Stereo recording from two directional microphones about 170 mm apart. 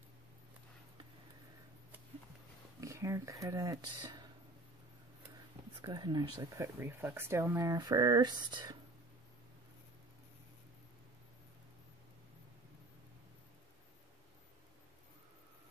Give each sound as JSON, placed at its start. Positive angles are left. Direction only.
{"t": 2.8, "sound": "speech", "side_deg": -15}
{"t": 5.8, "sound": "speech", "side_deg": -25}